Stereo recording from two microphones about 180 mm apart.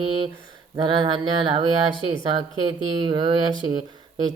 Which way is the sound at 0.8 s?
25° right (ahead or behind).